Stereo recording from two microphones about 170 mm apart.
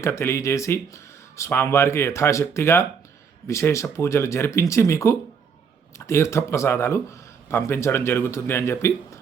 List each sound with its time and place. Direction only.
0.0 s speech: 15° left (ahead or behind)